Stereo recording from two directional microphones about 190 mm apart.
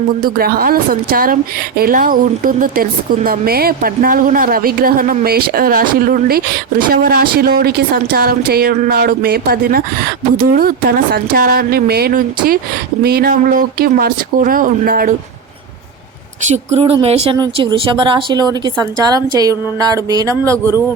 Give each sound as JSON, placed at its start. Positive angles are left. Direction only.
{"t": 0.2, "sound": "speech", "side_deg": -50}
{"t": 16.4, "sound": "speech", "side_deg": -35}
{"t": 17.3, "sound": "a woman's voice", "side_deg": -20}